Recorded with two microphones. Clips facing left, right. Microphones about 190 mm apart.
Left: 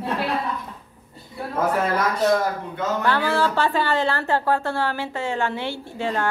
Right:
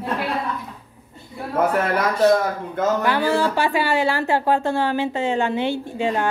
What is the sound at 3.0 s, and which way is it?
A woman's voice, 15° right (ahead or behind).